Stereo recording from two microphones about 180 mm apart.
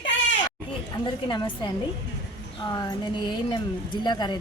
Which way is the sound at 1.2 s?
25° left (ahead or behind).